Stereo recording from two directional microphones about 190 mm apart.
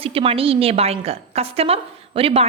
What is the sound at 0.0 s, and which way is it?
A woman's voice, 30° right (ahead or behind).